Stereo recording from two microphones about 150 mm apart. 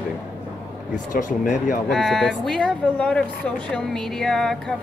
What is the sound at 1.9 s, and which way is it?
Speech, centre (ahead or behind).